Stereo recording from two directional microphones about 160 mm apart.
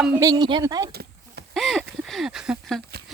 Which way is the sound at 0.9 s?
80° right.